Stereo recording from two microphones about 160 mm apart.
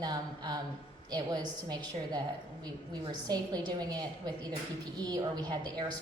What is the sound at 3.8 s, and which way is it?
A woman's voice, 25° right (ahead or behind).